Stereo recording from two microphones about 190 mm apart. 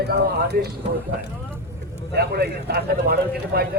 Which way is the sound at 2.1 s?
55° right (ahead or behind).